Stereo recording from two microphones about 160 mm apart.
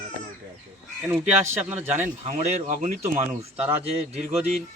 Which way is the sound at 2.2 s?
45° right (ahead or behind).